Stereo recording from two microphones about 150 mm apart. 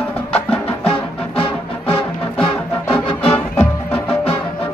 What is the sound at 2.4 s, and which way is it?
Music, 5° left (ahead or behind).